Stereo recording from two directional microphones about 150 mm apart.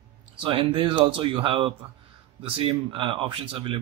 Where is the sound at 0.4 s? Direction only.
35° right (ahead or behind).